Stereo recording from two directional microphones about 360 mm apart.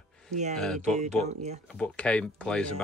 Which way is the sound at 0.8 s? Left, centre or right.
Centre.